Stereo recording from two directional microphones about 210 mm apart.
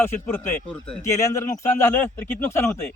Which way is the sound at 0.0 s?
10° left (ahead or behind).